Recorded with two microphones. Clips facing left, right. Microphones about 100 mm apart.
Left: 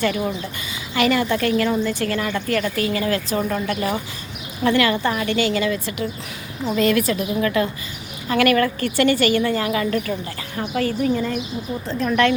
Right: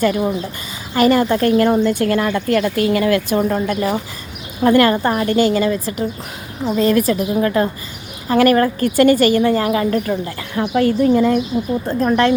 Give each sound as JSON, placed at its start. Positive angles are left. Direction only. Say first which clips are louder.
{"t": 0.0, "sound": "a woman's voice", "louder": "right 5 dB", "side_deg": -35}
{"t": 1.7, "sound": "a woman's voice", "louder": "right 6 dB", "side_deg": -50}
{"t": 3.5, "sound": "a woman's voice", "louder": "right 4 dB", "side_deg": -40}